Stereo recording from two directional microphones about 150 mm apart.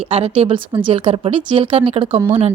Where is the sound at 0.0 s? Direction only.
40° right (ahead or behind).